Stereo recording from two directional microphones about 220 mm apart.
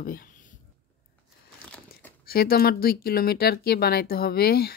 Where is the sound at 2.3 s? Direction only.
45° left (ahead or behind).